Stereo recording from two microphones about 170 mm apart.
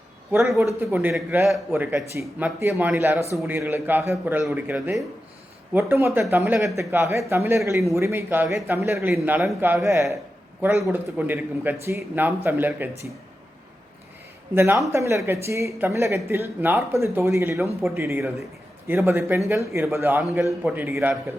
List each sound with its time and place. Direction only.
0.8 s speech: 10° right (ahead or behind)
14.5 s speech: 15° right (ahead or behind)